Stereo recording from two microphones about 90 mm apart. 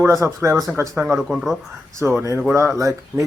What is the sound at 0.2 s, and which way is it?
Speech, 35° right (ahead or behind).